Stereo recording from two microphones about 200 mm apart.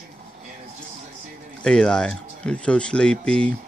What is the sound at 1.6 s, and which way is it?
Speech, 5° left (ahead or behind).